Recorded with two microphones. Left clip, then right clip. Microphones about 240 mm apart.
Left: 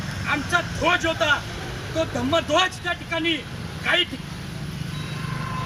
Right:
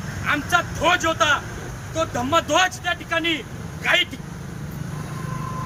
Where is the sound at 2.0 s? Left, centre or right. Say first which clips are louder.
Right 2 dB; centre.